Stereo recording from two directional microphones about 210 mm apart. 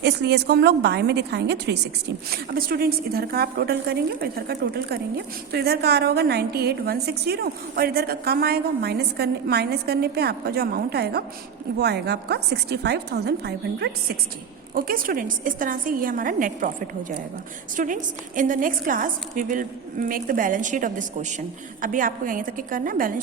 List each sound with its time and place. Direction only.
0.0 s a woman's voice: 50° right (ahead or behind)